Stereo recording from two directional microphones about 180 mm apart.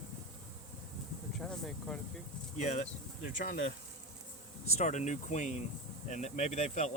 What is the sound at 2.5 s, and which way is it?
Speech, 40° left (ahead or behind).